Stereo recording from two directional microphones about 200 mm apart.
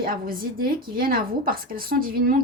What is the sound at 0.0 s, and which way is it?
Speech, 45° right (ahead or behind).